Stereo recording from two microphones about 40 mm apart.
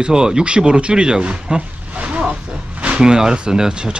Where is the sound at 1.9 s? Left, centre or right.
Right.